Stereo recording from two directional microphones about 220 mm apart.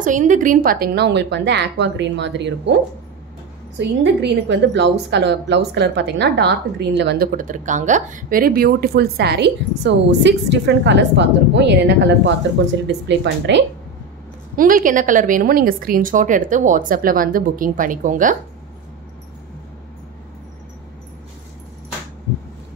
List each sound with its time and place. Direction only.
0.0 s a woman's voice: 35° right (ahead or behind); by 11.7 s 55° right (ahead or behind)
12.8 s a woman's voice: 50° right (ahead or behind)
14.6 s a woman's voice: 40° right (ahead or behind)